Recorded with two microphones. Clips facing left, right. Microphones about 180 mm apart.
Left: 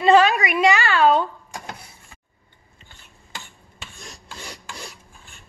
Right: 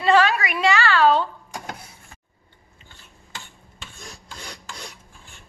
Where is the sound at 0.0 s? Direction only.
20° left (ahead or behind).